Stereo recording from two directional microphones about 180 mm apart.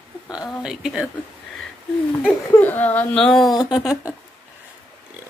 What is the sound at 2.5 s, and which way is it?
Speech, 10° left (ahead or behind).